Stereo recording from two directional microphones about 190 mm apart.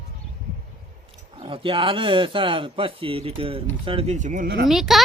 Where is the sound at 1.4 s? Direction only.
30° right (ahead or behind); by 4.6 s 50° right (ahead or behind).